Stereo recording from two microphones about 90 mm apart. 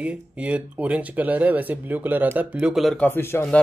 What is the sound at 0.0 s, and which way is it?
Speech, 15° right (ahead or behind).